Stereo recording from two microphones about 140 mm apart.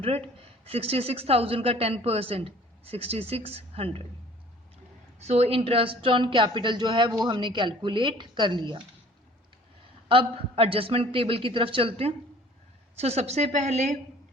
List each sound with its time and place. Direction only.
0.0 s a woman's voice: 45° right (ahead or behind)
5.2 s speech: 50° right (ahead or behind)
10.1 s a woman's voice: 40° right (ahead or behind)